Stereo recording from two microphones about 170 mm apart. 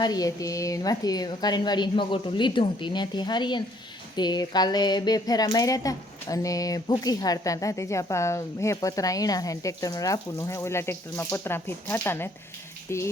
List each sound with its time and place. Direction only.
0.0 s speech: 20° left (ahead or behind)